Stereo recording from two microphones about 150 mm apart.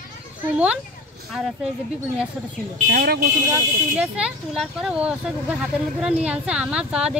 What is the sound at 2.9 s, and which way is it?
Speech, 85° right.